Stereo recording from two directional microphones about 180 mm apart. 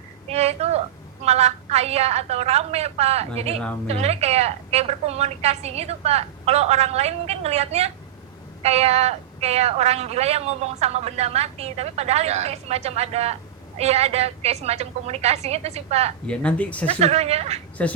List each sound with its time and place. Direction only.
0.3 s a sound: 35° right (ahead or behind)
1.2 s speech: 35° right (ahead or behind)
16.2 s speech: 5° left (ahead or behind)
16.8 s speech: 35° right (ahead or behind)
17.8 s speech: 5° left (ahead or behind)